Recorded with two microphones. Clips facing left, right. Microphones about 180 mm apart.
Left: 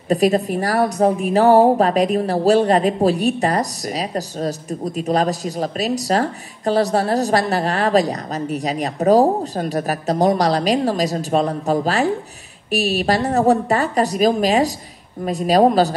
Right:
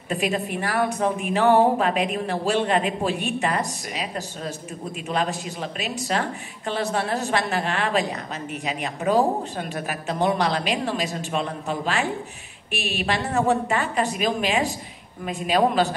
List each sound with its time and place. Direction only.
0.1 s a woman's voice: 40° left (ahead or behind)